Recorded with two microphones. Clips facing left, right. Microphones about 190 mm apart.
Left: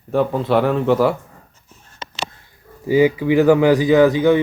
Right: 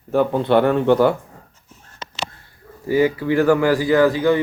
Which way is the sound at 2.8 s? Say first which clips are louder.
Left 3 dB; 15° left (ahead or behind).